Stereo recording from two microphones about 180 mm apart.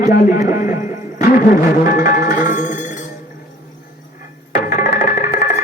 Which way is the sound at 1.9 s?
50° left (ahead or behind).